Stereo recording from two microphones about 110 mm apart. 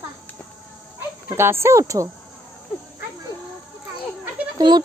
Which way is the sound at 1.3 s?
20° right (ahead or behind).